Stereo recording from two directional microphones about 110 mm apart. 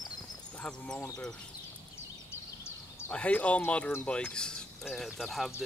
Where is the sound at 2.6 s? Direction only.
25° left (ahead or behind).